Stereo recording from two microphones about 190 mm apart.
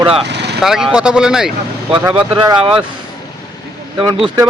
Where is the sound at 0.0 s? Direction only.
30° right (ahead or behind).